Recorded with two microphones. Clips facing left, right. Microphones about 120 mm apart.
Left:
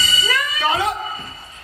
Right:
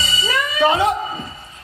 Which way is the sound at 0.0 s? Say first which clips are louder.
Right 1 dB; 25° right (ahead or behind).